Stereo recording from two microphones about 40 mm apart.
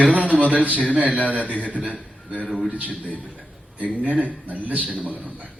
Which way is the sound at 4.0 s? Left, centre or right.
Right.